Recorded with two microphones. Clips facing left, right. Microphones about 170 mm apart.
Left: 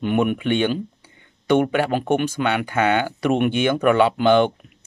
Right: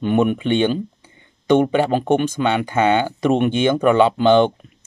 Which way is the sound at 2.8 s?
25° right (ahead or behind).